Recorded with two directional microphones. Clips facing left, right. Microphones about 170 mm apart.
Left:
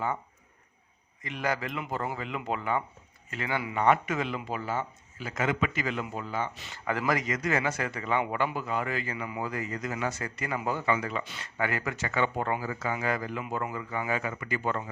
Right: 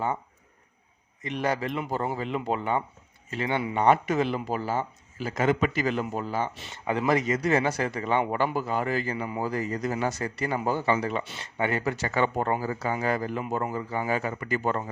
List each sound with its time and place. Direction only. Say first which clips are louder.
1.2 s speech: right 4 dB; 30° right (ahead or behind)